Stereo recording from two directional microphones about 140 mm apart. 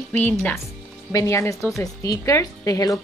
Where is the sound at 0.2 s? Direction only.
15° left (ahead or behind).